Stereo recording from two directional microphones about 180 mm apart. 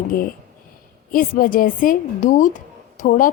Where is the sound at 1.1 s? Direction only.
50° left (ahead or behind).